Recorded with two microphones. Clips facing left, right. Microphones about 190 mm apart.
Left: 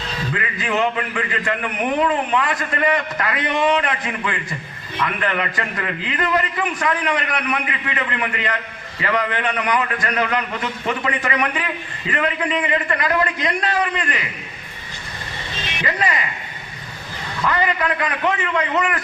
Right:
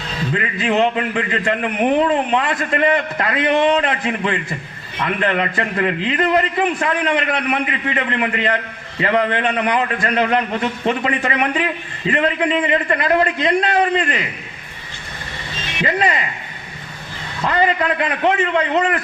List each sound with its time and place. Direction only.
0.3 s a man's voice: 30° right (ahead or behind)
15.8 s a man's voice: 30° right (ahead or behind)
17.4 s a man's voice: 30° right (ahead or behind)